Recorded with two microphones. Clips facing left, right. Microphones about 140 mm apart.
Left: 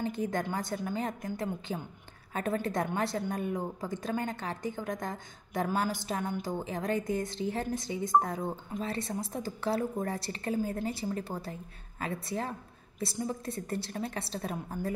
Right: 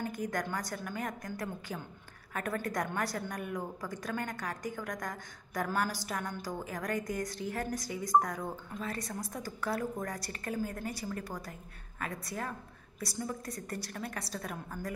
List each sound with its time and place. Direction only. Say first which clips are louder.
0.0 s a woman's voice: left 3 dB; 25° left (ahead or behind)